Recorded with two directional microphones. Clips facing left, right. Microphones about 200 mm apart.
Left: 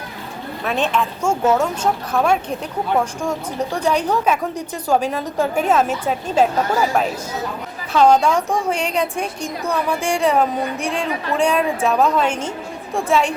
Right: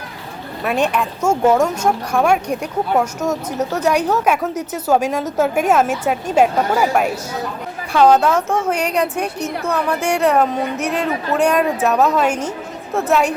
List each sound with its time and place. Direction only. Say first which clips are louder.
0.6 s a woman's voice: right 2 dB; 10° right (ahead or behind)
7.9 s a woman's voice: right 1 dB; 5° right (ahead or behind)
8.4 s a woman's voice: right 2 dB; 15° left (ahead or behind)
8.7 s a woman's voice: right 2 dB; 5° right (ahead or behind)